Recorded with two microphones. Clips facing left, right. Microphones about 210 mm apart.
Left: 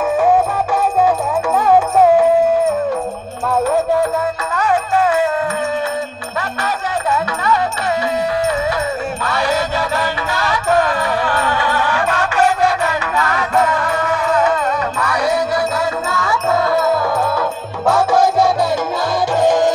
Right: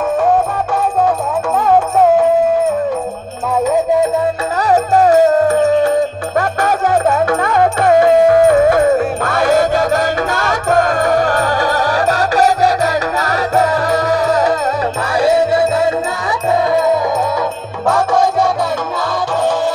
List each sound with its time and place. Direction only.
1.7 s music: 5° left (ahead or behind)
3.6 s music: 15° right (ahead or behind)
4.6 s music: 40° right (ahead or behind); by 17.0 s 20° right (ahead or behind)
17.8 s music: 5° left (ahead or behind)
19.4 s music: 15° left (ahead or behind)